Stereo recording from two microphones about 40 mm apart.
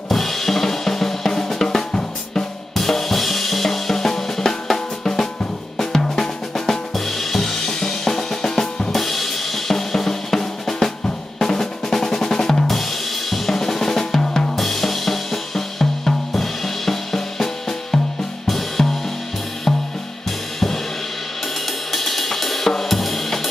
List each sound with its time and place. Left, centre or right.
0.1 s drum kit: centre
2.7 s drum kit: centre
5.8 s drum: centre
6.9 s drum kit: centre
8.9 s drum kit: centre
11.3 s drum: centre
13.3 s drum kit: centre
14.5 s drum kit: centre
21.9 s cymbal: centre